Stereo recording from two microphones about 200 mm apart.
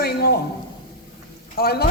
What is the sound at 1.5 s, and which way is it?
Speech, 50° left (ahead or behind).